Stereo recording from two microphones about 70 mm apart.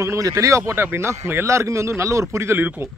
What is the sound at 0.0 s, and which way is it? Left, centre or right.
A man's voice, right.